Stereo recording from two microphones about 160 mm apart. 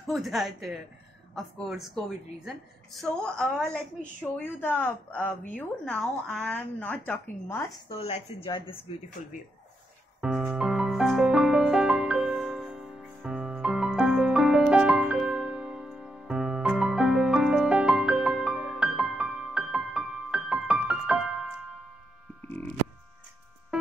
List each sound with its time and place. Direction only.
0.0 s a woman's voice: centre (ahead or behind)
8.0 s speech: 40° left (ahead or behind)
10.2 s music: 5° right (ahead or behind)
22.4 s a sound: 10° left (ahead or behind)
23.7 s music: 5° right (ahead or behind)